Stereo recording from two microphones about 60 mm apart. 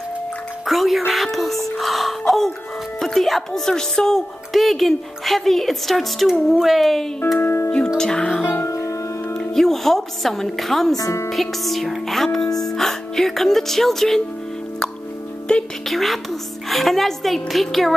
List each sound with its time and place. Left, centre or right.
0.7 s speech: centre
7.3 s music: left
8.0 s speech: centre
8.5 s music: left
9.4 s speech: centre
15.5 s speech: centre
15.9 s speech: centre